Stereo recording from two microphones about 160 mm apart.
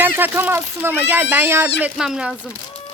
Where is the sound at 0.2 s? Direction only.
10° right (ahead or behind).